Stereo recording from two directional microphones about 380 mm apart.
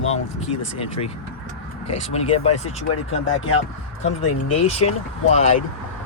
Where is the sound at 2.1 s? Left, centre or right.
Centre.